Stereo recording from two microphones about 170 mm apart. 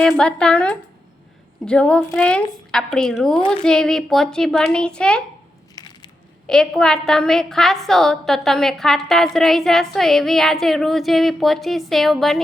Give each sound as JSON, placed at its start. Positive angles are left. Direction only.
{"t": 0.0, "sound": "a woman's voice", "side_deg": 5}
{"t": 5.7, "sound": "crunch", "side_deg": 25}
{"t": 6.5, "sound": "a woman's voice", "side_deg": 5}